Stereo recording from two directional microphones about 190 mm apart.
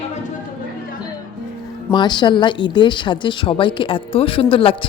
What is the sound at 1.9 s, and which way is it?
A woman's voice, 25° left (ahead or behind).